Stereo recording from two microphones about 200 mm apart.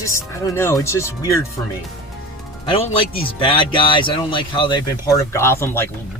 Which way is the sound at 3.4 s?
25° left (ahead or behind).